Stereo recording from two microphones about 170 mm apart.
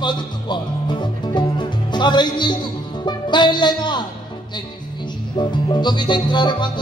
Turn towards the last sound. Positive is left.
turn(degrees=25)  # may be behind; listen again after turning